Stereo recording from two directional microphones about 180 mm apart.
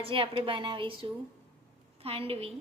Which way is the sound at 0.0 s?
30° right (ahead or behind).